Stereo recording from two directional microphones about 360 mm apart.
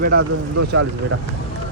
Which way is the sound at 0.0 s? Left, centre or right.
Right.